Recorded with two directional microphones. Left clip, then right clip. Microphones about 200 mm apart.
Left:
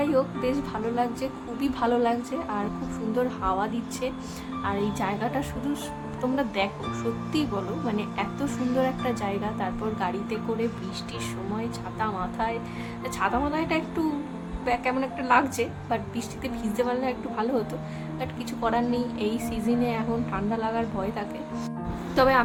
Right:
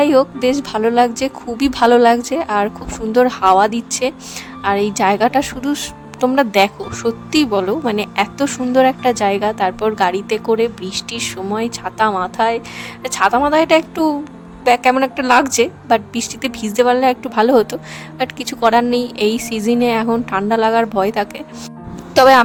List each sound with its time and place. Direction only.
0.0 s a woman's voice: 55° right (ahead or behind)